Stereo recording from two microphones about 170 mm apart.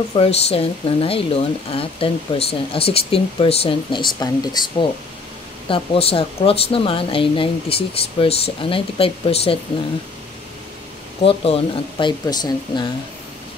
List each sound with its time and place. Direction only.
0.1 s speech: 35° left (ahead or behind)
5.7 s speech: 35° left (ahead or behind)
11.2 s speech: 35° left (ahead or behind)